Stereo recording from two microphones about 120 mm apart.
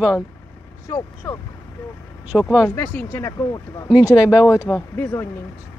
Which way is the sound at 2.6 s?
20° left (ahead or behind).